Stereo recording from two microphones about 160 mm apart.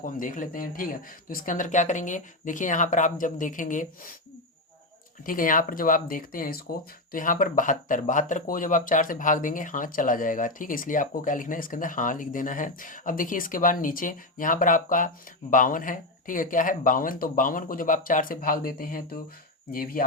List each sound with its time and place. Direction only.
0.0 s speech: 55° left (ahead or behind)
5.2 s speech: 60° left (ahead or behind)